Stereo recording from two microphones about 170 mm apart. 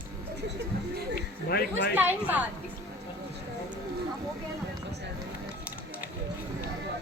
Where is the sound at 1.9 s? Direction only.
10° right (ahead or behind).